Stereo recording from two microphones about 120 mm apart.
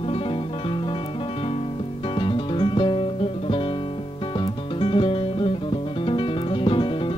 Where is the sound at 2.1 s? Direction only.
45° left (ahead or behind).